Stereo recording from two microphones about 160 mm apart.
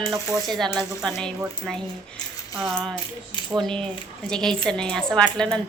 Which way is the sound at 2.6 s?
5° left (ahead or behind).